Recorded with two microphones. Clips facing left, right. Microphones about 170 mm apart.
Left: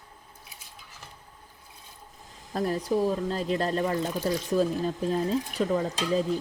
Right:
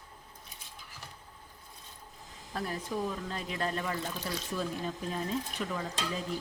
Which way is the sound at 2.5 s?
40° left (ahead or behind).